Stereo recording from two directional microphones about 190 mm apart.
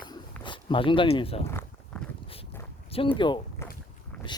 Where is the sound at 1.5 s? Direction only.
10° left (ahead or behind).